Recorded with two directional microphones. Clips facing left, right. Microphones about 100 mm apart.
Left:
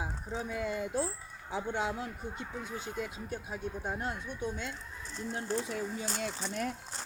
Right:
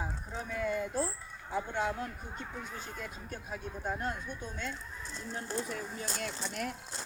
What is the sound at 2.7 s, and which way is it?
Speech, 20° left (ahead or behind).